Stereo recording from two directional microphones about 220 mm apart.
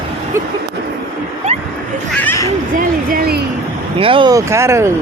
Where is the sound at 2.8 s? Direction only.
40° right (ahead or behind).